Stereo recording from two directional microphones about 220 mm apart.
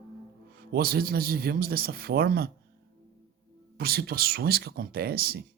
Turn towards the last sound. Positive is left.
turn(degrees=-45)  # may be behind; listen again after turning